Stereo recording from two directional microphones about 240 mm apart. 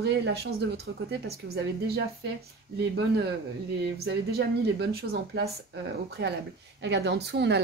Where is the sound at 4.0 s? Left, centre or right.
Right.